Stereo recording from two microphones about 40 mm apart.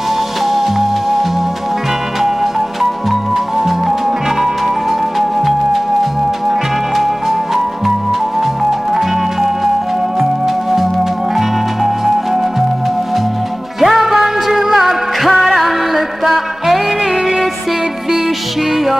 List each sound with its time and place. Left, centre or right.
0.5 s music: centre
2.8 s music: centre
7.0 s music: centre
10.4 s music: centre
13.7 s music: centre